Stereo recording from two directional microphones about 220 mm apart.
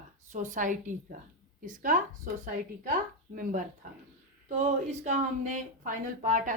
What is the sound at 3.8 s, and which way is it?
Speech, 35° right (ahead or behind).